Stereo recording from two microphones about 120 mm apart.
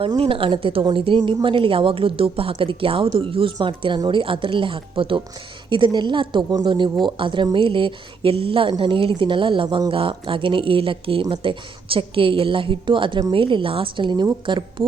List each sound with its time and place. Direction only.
0.2 s speech: 50° right (ahead or behind)